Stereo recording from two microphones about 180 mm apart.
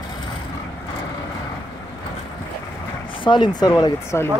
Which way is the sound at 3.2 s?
25° left (ahead or behind).